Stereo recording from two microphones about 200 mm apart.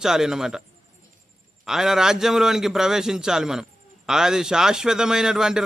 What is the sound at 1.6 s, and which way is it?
Speech, centre (ahead or behind).